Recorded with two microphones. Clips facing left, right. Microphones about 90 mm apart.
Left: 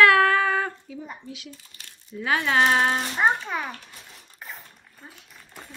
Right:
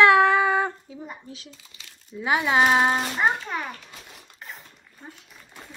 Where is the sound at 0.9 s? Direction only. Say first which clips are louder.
Left 1 dB; 30° right (ahead or behind).